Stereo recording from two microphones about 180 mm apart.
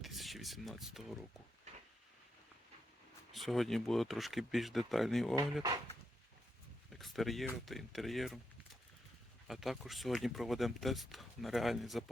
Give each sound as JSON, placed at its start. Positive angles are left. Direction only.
{"t": 0.0, "sound": "speech", "side_deg": 0}
{"t": 1.7, "sound": "a sound", "side_deg": -40}
{"t": 3.3, "sound": "speech", "side_deg": 0}
{"t": 6.9, "sound": "speech", "side_deg": 0}
{"t": 9.5, "sound": "speech", "side_deg": 0}